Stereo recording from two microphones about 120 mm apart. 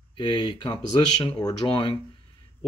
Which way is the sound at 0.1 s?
40° left (ahead or behind).